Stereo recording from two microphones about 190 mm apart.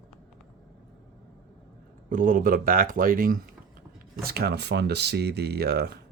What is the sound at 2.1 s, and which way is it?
Speech, 45° right (ahead or behind).